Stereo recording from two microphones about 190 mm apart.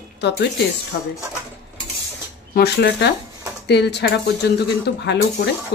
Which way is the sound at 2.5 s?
60° left (ahead or behind).